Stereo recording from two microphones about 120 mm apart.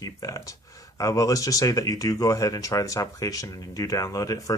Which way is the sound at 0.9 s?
30° left (ahead or behind).